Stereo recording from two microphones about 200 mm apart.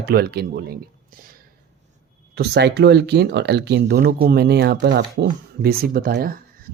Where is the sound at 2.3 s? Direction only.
55° right (ahead or behind).